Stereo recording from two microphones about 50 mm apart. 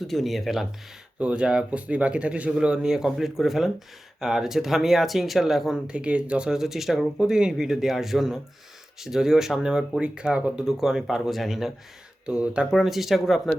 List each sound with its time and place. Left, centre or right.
0.0 s speech: centre
1.2 s speech: right; by 5.8 s centre
5.9 s speech: right
6.5 s speech: centre
10.0 s speech: right
10.6 s speech: centre
12.2 s speech: right
12.7 s speech: centre